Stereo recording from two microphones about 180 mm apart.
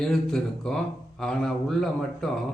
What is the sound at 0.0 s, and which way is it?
Speech, centre (ahead or behind).